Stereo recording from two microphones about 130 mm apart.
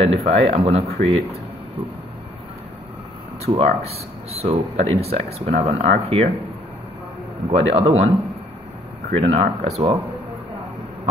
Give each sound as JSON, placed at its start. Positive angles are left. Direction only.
{"t": 0.0, "sound": "speech", "side_deg": -50}
{"t": 3.4, "sound": "speech", "side_deg": -50}
{"t": 7.4, "sound": "speech", "side_deg": -50}
{"t": 9.2, "sound": "speech", "side_deg": -55}